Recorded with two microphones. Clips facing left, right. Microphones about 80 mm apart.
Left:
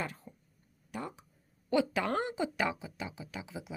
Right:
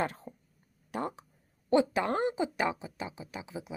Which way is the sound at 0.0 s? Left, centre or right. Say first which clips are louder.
Right 6 dB; right.